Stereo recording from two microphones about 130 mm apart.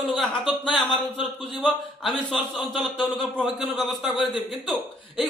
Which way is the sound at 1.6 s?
5° left (ahead or behind).